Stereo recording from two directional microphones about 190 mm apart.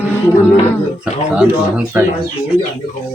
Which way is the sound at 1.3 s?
5° right (ahead or behind).